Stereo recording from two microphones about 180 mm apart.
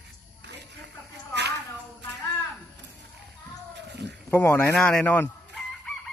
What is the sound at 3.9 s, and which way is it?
Cat, 70° right (ahead or behind).